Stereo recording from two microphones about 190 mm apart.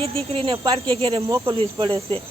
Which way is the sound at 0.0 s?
30° right (ahead or behind).